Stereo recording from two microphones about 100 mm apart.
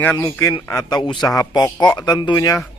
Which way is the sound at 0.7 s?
35° left (ahead or behind).